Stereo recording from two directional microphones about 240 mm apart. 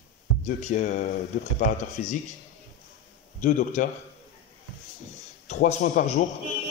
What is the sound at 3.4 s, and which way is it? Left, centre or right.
Speech, left.